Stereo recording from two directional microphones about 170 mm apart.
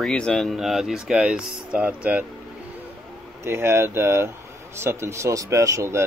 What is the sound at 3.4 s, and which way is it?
Speech, 15° right (ahead or behind).